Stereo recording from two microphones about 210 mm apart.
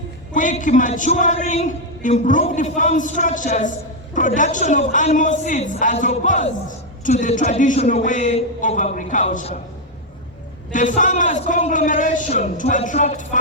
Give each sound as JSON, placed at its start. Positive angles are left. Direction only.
{"t": 0.3, "sound": "a man's voice", "side_deg": 40}
{"t": 10.7, "sound": "a man's voice", "side_deg": 35}